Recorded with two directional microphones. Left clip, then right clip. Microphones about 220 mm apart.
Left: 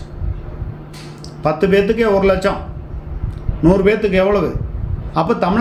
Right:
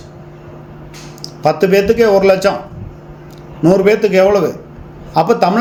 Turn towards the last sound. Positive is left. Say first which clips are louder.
# right 5 dB
turn(degrees=-20)  # may be behind; listen again after turning